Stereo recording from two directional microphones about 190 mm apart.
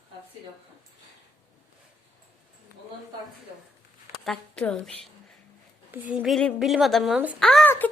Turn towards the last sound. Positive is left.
turn(degrees=10)  # may be behind; listen again after turning